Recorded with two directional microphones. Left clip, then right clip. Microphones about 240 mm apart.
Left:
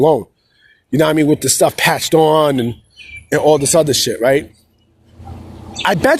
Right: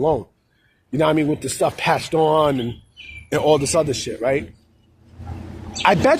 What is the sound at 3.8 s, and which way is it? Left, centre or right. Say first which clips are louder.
Speech: left 8 dB; left.